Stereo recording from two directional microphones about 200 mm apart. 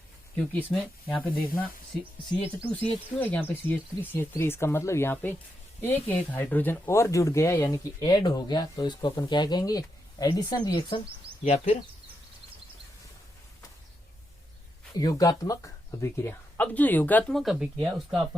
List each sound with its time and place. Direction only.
0.3 s speech: 5° left (ahead or behind)
3.2 s speech: 10° left (ahead or behind)
11.4 s speech: 35° left (ahead or behind)
14.9 s speech: 20° left (ahead or behind); by 18.2 s centre (ahead or behind)